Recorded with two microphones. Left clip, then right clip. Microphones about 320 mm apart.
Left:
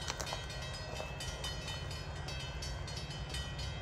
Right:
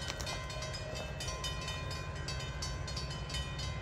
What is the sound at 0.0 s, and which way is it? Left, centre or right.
Train, left.